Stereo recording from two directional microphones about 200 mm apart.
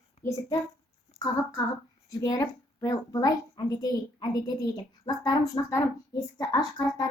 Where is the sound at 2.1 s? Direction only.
15° left (ahead or behind).